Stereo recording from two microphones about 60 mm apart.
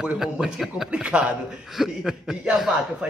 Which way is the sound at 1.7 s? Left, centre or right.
Centre.